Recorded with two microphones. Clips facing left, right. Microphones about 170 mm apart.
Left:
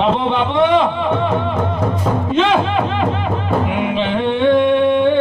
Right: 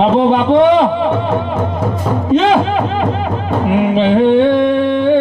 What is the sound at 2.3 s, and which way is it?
Music, 40° right (ahead or behind).